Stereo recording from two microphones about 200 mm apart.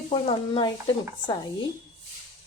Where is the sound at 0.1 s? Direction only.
25° left (ahead or behind).